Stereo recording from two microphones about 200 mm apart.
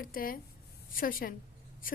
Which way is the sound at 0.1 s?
45° left (ahead or behind).